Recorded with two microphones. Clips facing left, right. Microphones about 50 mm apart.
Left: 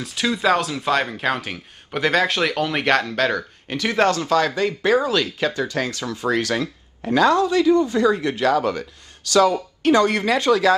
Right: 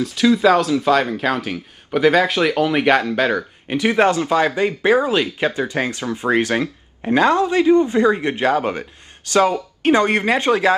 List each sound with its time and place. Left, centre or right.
0.0 s speech: centre; by 10.7 s right